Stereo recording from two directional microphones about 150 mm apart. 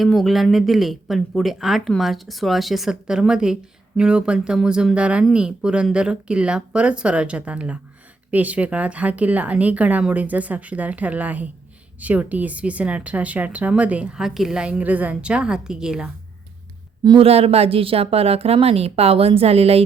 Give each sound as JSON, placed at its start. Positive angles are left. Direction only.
{"t": 0.0, "sound": "a woman's voice", "side_deg": 0}
{"t": 17.0, "sound": "speech", "side_deg": -30}
{"t": 17.2, "sound": "a woman's voice", "side_deg": -40}